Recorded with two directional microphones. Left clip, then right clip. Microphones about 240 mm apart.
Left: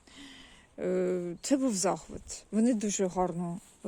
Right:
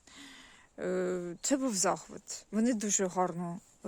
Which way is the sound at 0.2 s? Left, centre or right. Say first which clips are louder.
Left 2 dB; centre.